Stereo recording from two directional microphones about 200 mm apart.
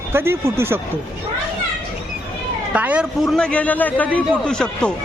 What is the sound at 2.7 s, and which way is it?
A man's voice, 5° right (ahead or behind).